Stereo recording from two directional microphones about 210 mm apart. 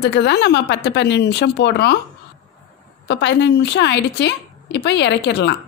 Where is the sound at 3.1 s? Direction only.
55° left (ahead or behind).